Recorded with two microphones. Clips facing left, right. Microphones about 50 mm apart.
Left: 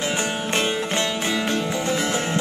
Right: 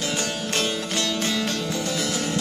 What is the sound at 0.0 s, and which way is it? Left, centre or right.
Music, left.